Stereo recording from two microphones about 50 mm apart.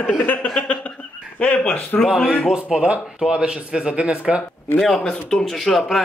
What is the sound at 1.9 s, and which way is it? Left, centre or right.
Speech, left.